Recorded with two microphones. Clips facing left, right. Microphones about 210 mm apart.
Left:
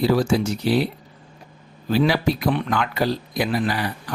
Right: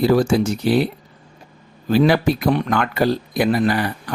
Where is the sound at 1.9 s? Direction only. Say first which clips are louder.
Right 4 dB; 50° right (ahead or behind).